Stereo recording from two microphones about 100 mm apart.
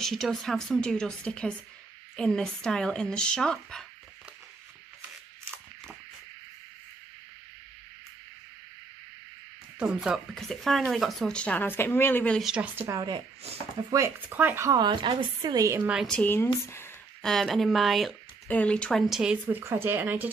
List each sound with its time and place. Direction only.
0.0 s speech: 5° left (ahead or behind)
9.8 s speech: 10° right (ahead or behind)
11.3 s a woman's voice: 15° left (ahead or behind)
12.4 s speech: 5° right (ahead or behind)
12.7 s speech: 30° right (ahead or behind)
14.3 s speech: 20° right (ahead or behind)
14.7 s a woman's voice: 50° right (ahead or behind)
15.5 s a woman's voice: 30° right (ahead or behind)
15.8 s speech: 10° right (ahead or behind)
16.1 s a woman's voice: 15° left (ahead or behind)
17.2 s speech: 5° left (ahead or behind)
18.5 s speech: 10° left (ahead or behind)
19.4 s speech: 20° right (ahead or behind)